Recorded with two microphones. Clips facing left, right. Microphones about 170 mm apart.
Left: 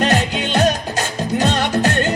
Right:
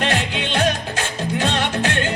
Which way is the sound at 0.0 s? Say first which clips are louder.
Left 4 dB; 40° left (ahead or behind).